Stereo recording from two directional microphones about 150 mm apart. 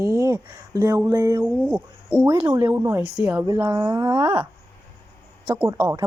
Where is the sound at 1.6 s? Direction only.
10° right (ahead or behind); by 4.3 s 30° right (ahead or behind).